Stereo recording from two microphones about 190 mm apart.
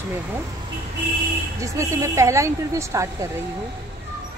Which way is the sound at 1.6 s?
15° right (ahead or behind).